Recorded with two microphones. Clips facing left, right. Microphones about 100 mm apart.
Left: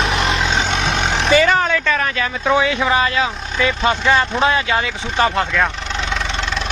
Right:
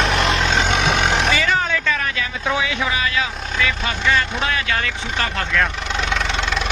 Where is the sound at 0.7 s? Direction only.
60° right (ahead or behind).